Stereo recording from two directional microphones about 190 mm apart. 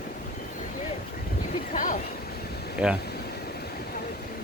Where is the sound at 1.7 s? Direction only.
45° left (ahead or behind).